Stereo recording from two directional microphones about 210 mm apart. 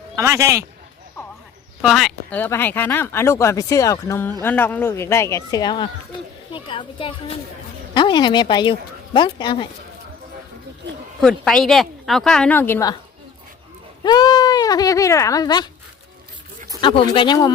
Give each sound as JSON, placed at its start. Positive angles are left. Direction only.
{"t": 0.2, "sound": "a man's voice", "side_deg": -15}
{"t": 1.8, "sound": "speech", "side_deg": 0}
{"t": 10.8, "sound": "a sound", "side_deg": -55}
{"t": 11.2, "sound": "speech", "side_deg": 0}
{"t": 14.0, "sound": "speech", "side_deg": 20}
{"t": 16.8, "sound": "speech", "side_deg": 25}